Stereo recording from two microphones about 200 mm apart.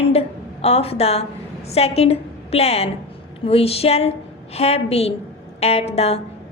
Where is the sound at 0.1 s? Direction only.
30° left (ahead or behind).